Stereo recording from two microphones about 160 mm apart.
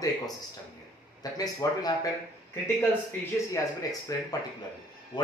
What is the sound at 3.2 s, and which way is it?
Speech, 20° left (ahead or behind).